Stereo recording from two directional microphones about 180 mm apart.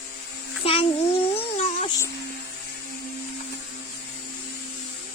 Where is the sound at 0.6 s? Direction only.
30° left (ahead or behind).